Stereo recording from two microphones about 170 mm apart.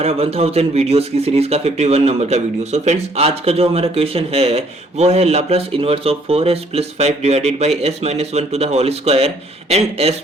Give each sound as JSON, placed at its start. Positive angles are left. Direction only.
{"t": 0.0, "sound": "speech", "side_deg": -35}